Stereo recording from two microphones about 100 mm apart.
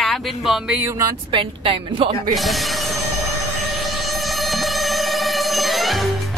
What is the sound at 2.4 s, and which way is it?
Speech, centre (ahead or behind).